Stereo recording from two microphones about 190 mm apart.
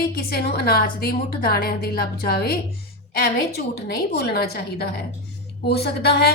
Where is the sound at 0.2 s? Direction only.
55° left (ahead or behind).